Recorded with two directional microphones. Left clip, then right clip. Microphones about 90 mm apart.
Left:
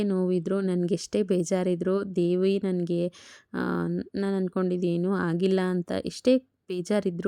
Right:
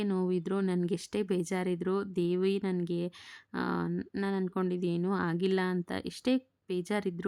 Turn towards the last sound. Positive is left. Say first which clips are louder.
# left 6 dB
turn(degrees=30)  # may be behind; listen again after turning